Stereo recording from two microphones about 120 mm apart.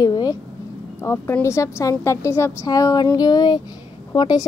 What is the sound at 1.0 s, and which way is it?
A child's voice, 20° left (ahead or behind).